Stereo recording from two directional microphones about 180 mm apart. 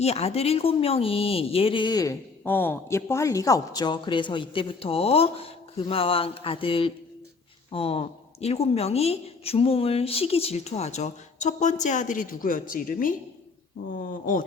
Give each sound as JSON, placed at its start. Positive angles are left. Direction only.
{"t": 0.0, "sound": "speech", "side_deg": 35}